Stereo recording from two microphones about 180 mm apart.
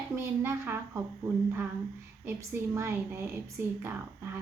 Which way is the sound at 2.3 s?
15° right (ahead or behind).